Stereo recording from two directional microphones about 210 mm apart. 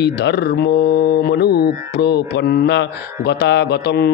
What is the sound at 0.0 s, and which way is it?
A man's voice, 55° left (ahead or behind).